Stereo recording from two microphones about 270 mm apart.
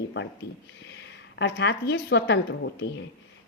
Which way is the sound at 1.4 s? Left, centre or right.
Left.